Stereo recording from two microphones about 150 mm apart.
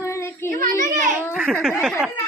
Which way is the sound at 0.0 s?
20° left (ahead or behind).